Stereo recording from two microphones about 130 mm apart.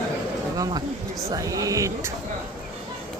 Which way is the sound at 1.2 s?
25° right (ahead or behind).